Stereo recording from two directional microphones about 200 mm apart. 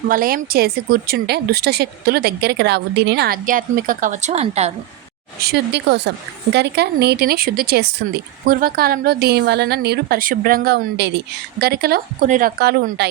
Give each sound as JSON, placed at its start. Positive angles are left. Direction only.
{"t": 0.1, "sound": "a woman's voice", "side_deg": -45}
{"t": 5.4, "sound": "a woman's voice", "side_deg": -55}